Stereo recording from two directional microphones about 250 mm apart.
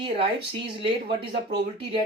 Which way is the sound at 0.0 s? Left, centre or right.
Right.